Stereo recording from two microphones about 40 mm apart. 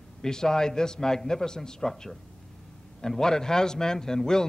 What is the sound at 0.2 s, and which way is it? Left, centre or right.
A man's voice, centre.